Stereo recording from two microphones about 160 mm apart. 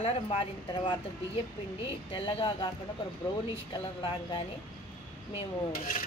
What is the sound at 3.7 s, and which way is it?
Speech, 25° left (ahead or behind).